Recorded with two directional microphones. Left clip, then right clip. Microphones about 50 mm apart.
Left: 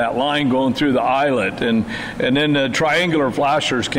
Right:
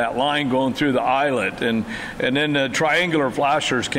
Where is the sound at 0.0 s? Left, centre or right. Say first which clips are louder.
Left 2 dB; right.